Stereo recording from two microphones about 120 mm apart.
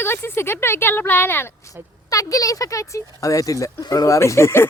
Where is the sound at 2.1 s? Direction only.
30° left (ahead or behind).